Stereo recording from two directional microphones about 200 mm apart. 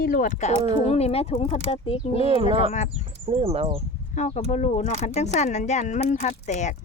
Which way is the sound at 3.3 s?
30° right (ahead or behind).